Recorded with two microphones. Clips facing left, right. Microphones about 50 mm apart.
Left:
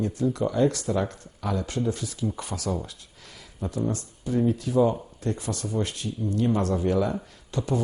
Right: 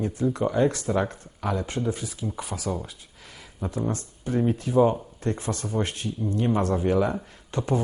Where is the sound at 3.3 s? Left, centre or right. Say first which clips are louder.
Even; right.